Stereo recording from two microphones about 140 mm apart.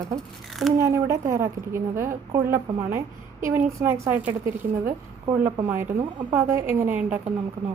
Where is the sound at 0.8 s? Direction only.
20° right (ahead or behind).